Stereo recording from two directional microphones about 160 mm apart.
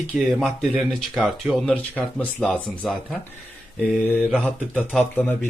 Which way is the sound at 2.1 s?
5° left (ahead or behind).